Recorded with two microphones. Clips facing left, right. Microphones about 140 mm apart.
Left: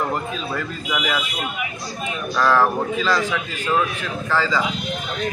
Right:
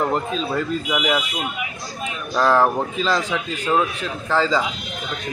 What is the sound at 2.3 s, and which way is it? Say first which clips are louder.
A man's voice: right 1 dB; 25° right (ahead or behind).